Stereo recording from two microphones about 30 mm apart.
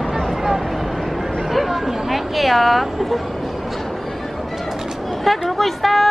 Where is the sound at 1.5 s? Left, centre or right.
Centre.